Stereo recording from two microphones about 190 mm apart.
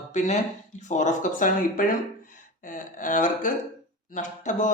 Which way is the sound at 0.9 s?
40° left (ahead or behind).